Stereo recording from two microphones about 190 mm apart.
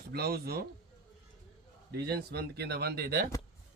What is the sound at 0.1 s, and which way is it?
Speech, 55° right (ahead or behind).